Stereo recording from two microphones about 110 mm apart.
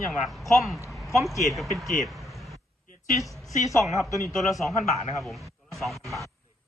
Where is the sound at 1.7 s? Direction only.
Centre (ahead or behind).